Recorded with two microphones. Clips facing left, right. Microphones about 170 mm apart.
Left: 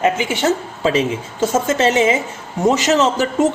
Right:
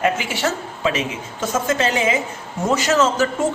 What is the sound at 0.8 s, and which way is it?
Speech, 30° left (ahead or behind).